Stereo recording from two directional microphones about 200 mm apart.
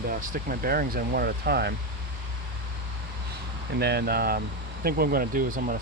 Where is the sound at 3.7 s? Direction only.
55° right (ahead or behind).